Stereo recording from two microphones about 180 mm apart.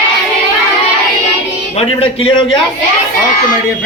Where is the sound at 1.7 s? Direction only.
35° left (ahead or behind).